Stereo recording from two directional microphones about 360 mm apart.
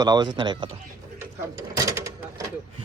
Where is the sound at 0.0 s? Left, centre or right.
Centre.